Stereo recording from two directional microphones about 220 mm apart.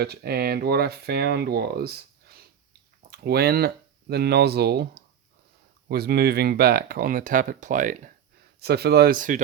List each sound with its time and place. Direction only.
0.0 s speech: 45° right (ahead or behind)
8.6 s speech: 45° right (ahead or behind)